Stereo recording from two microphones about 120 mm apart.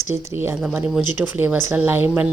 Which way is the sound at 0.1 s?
20° right (ahead or behind).